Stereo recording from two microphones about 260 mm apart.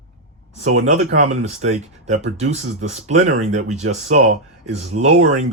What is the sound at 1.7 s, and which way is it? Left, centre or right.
Speech, right.